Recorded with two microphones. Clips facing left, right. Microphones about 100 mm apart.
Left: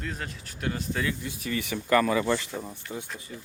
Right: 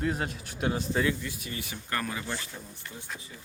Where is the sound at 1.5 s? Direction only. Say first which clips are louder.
Left 13 dB; 80° left.